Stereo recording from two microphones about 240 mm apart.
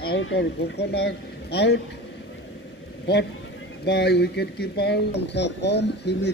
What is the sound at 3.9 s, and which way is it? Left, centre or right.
A man's voice, left.